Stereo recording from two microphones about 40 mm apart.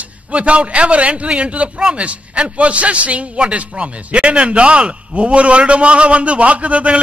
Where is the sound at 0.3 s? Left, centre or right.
Right.